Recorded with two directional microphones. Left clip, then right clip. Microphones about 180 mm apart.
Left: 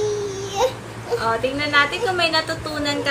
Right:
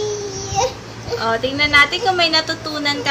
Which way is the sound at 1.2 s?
30° right (ahead or behind).